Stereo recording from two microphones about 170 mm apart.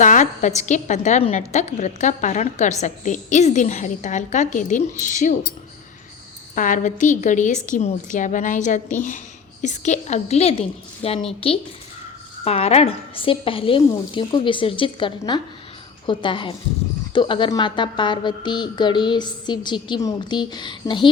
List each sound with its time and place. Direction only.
0.0 s a woman's voice: 45° left (ahead or behind)
6.6 s a woman's voice: 50° left (ahead or behind); by 21.1 s 25° left (ahead or behind)